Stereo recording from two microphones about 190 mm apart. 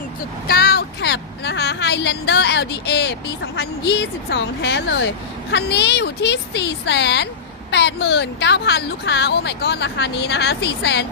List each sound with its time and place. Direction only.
0.4 s a woman's voice: 55° left (ahead or behind)